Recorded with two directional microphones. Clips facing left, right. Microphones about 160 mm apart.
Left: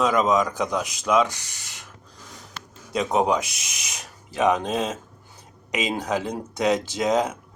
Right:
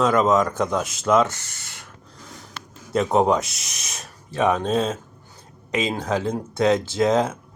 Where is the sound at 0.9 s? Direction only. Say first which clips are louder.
Right 2 dB; 15° left (ahead or behind).